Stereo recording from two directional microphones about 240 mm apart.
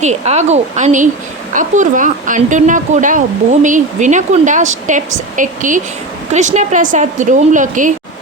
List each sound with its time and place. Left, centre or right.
0.0 s speech: right